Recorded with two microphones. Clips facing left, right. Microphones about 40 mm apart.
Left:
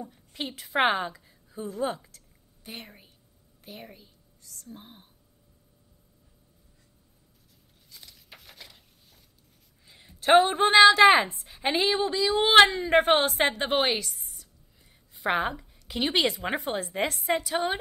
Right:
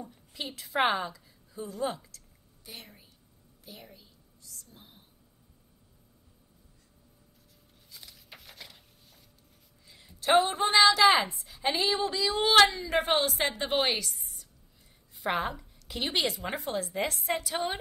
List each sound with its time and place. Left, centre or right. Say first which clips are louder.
0.0 s a woman's voice: left 4 dB; centre
1.7 s a woman's voice: left 3 dB; left
2.0 s whispering: even; left
3.6 s a woman's voice: left 5 dB; left
7.9 s a sound: even; centre
9.8 s a woman's voice: left 5 dB; left
12.4 s a woman's voice: left 4 dB; left
13.8 s a woman's voice: left 2 dB; left
16.0 s a woman's voice: left 5 dB; left
17.2 s a woman's voice: left 4 dB; left